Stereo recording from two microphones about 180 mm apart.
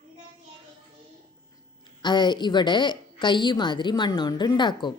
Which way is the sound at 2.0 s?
25° left (ahead or behind).